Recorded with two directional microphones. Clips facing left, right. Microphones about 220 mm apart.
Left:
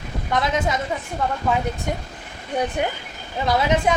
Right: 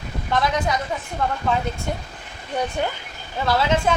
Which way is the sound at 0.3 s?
20° left (ahead or behind).